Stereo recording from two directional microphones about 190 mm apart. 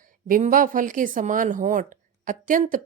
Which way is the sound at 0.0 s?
45° right (ahead or behind).